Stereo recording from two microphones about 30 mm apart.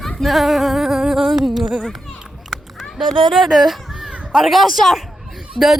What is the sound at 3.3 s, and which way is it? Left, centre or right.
A man's voice, centre.